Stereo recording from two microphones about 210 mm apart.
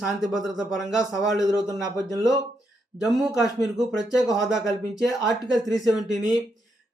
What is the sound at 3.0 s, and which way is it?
Speech, centre (ahead or behind).